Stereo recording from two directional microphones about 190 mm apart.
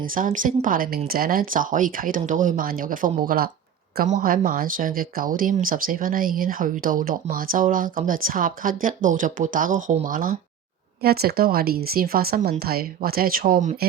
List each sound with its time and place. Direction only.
0.0 s speech: 45° right (ahead or behind)